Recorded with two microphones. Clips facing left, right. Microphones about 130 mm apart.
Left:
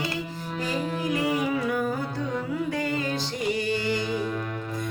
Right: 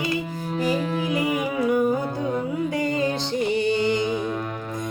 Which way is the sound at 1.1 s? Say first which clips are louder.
Even; 15° right (ahead or behind).